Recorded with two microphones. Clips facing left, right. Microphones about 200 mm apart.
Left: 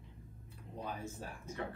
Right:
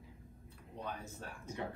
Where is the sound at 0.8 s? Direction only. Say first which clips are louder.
Left 2 dB; 5° left (ahead or behind).